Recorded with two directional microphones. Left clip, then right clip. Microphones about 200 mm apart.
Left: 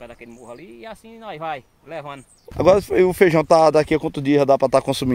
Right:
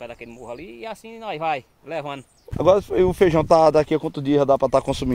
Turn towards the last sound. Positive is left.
turn(degrees=25)  # may be behind; listen again after turning